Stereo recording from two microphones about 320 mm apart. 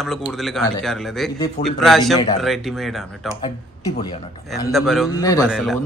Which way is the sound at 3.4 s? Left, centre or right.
Centre.